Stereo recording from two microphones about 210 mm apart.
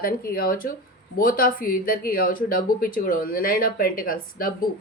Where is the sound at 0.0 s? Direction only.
45° left (ahead or behind).